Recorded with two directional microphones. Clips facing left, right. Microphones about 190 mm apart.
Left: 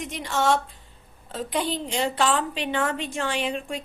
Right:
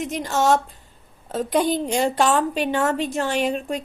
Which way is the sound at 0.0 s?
45° right (ahead or behind).